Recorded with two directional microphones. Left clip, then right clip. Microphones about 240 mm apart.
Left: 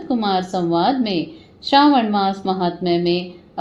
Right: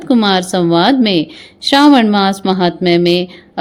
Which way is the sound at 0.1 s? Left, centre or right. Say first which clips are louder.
Right 7 dB; right.